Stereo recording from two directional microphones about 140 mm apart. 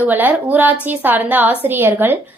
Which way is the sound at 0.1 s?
15° right (ahead or behind).